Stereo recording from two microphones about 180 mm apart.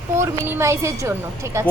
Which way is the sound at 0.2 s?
15° right (ahead or behind).